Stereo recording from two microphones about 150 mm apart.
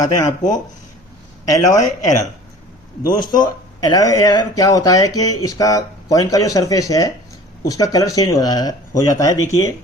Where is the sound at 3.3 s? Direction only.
25° left (ahead or behind).